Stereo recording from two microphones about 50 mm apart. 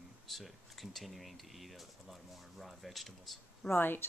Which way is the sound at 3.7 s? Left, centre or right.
Left.